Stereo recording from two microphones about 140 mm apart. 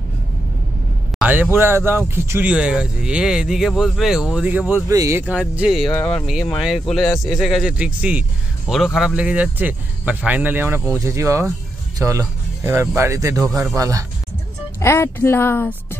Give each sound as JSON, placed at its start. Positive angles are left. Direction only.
{"t": 1.2, "sound": "speech", "side_deg": -15}
{"t": 5.2, "sound": "speech", "side_deg": -10}
{"t": 14.8, "sound": "speech", "side_deg": 20}